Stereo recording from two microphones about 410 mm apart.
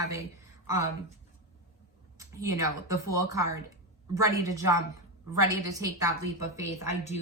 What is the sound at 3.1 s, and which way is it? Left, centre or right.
A woman's voice, centre.